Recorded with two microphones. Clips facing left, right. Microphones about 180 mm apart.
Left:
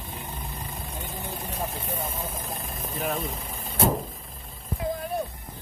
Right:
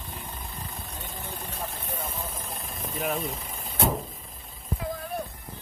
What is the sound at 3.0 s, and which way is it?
Speech, centre (ahead or behind).